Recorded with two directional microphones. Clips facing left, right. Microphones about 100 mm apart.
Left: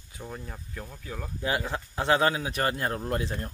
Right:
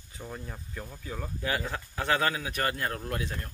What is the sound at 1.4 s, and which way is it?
Speech, 20° left (ahead or behind).